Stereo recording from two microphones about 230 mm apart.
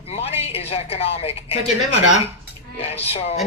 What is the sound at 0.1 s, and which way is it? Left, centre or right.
A woman's voice, left.